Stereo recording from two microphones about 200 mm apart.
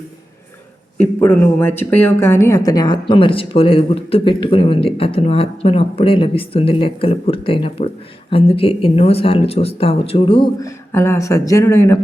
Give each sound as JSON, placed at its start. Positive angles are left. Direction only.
{"t": 0.9, "sound": "a woman's voice", "side_deg": 10}